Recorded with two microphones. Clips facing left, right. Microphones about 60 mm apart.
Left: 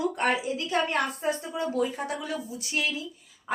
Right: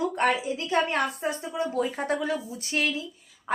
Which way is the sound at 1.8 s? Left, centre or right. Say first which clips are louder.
Right 3 dB; right.